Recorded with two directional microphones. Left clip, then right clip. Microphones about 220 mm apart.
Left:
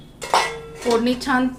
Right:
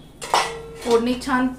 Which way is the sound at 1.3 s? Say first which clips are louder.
Left 2 dB; 40° left (ahead or behind).